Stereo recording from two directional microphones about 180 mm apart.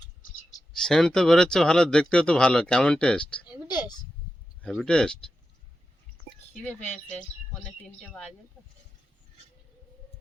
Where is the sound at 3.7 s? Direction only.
25° left (ahead or behind).